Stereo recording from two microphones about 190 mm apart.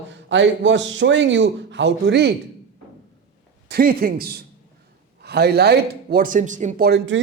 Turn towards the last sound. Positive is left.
turn(degrees=-70)  # may be behind; listen again after turning